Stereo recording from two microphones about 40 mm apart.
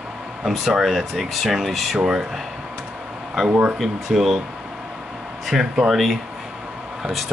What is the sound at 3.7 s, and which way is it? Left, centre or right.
Speech, centre.